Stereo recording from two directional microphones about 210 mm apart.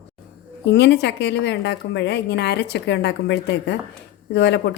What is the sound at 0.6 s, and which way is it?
A woman's voice, 55° left (ahead or behind).